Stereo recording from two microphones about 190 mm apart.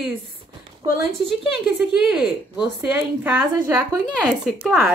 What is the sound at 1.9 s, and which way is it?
A woman's voice, 5° right (ahead or behind).